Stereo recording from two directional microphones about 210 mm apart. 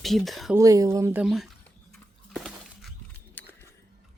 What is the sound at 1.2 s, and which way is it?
Speech, centre (ahead or behind).